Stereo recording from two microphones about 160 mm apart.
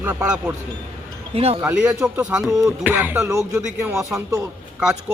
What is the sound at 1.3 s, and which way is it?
Speech, 40° right (ahead or behind).